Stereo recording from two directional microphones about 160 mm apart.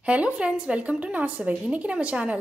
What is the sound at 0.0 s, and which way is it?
A woman's voice, 10° right (ahead or behind).